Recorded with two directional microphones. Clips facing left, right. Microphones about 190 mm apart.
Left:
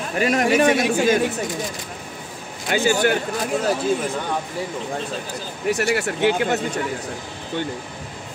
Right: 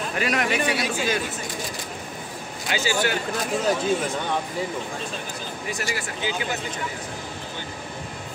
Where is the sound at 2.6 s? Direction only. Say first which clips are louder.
Left 6 dB; 55° left (ahead or behind).